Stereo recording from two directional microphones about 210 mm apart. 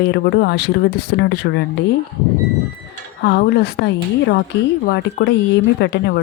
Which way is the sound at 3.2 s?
50° left (ahead or behind).